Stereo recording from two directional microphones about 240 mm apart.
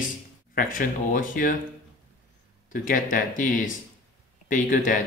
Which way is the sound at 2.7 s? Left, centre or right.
Left.